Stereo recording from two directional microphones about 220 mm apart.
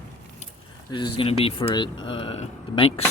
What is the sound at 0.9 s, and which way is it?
Speech, 20° left (ahead or behind).